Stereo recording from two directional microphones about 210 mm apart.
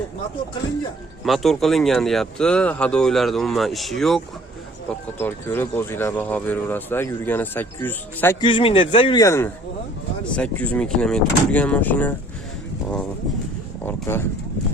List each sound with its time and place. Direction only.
1.2 s speech: centre (ahead or behind)
5.2 s speech: 10° left (ahead or behind)
8.4 s speech: 25° left (ahead or behind); by 12.1 s 10° left (ahead or behind)
13.8 s speech: 10° left (ahead or behind)